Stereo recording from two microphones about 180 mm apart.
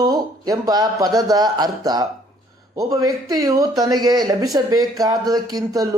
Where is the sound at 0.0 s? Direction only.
20° right (ahead or behind).